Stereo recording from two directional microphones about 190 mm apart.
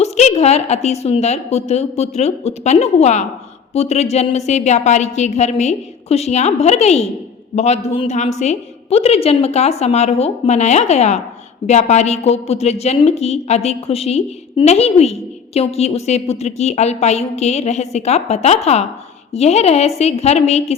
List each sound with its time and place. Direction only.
0.0 s a woman's voice: 35° left (ahead or behind)